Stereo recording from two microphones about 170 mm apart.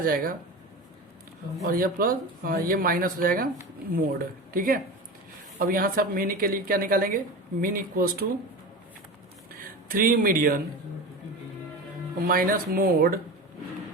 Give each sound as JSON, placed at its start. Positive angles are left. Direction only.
{"t": 0.0, "sound": "speech", "side_deg": -55}
{"t": 1.6, "sound": "speech", "side_deg": -55}
{"t": 9.9, "sound": "speech", "side_deg": -55}
{"t": 12.3, "sound": "speech", "side_deg": -60}